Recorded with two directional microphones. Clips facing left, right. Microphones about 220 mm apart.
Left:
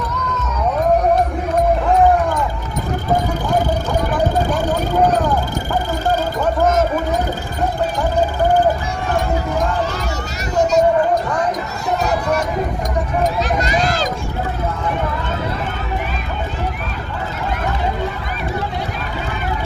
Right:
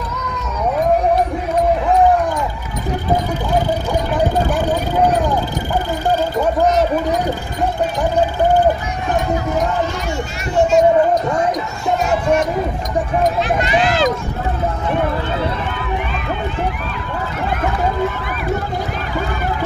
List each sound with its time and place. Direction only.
13.6 s run: 40° left (ahead or behind)